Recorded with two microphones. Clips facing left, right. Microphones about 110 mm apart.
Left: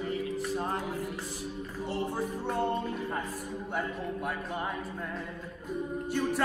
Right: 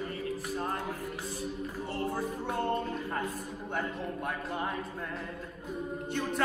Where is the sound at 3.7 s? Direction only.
5° left (ahead or behind).